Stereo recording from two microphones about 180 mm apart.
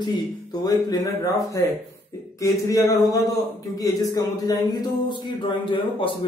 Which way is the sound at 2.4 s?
20° left (ahead or behind).